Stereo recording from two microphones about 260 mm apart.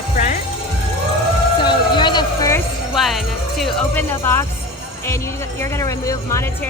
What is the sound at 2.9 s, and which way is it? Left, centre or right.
Speech, centre.